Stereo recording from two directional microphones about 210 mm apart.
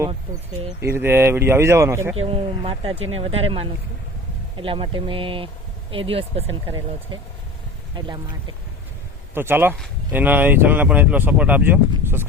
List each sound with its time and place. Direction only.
0.8 s speech: 10° right (ahead or behind)
2.2 s speech: 25° right (ahead or behind)
9.3 s speech: 10° right (ahead or behind)